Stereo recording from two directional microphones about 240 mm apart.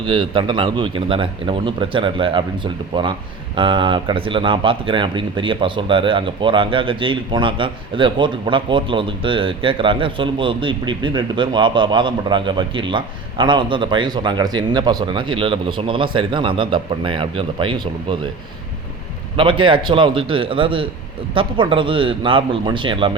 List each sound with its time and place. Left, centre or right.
0.0 s speech: right
19.4 s speech: right